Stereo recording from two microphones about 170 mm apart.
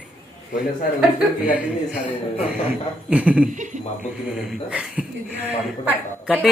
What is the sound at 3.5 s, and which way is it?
Speech, 45° right (ahead or behind).